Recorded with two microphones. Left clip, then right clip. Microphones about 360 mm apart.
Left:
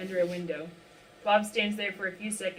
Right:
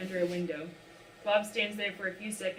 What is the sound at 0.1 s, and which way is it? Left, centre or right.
Speech, left.